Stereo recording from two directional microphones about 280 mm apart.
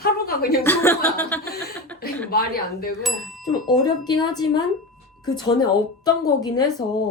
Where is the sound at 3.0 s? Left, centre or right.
Centre.